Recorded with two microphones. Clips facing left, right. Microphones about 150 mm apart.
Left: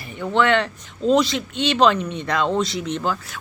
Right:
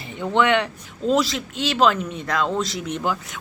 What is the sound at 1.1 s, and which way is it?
Speech, centre (ahead or behind).